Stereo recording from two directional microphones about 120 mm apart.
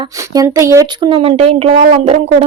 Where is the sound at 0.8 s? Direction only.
40° right (ahead or behind).